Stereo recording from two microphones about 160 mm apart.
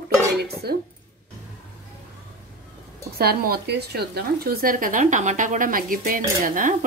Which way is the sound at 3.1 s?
70° right (ahead or behind).